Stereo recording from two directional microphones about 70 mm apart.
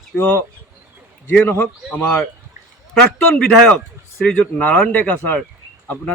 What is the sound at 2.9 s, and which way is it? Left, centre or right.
A man's voice, centre.